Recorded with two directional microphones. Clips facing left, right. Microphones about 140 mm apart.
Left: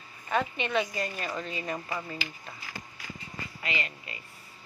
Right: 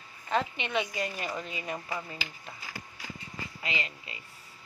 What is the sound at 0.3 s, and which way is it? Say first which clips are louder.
A woman's voice: left 1 dB; 20° right (ahead or behind).